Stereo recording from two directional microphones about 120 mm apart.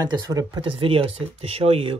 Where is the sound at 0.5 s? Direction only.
45° right (ahead or behind).